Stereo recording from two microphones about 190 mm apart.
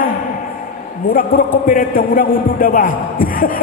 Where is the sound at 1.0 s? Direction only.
50° left (ahead or behind).